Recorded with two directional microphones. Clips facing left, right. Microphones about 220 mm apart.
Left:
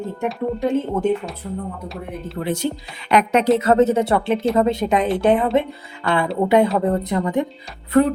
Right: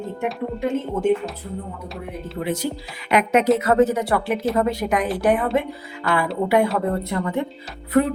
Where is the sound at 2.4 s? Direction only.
30° left (ahead or behind).